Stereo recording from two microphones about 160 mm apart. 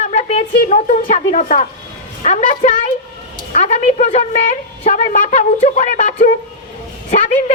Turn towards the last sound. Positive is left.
turn(degrees=45)  # may be behind; listen again after turning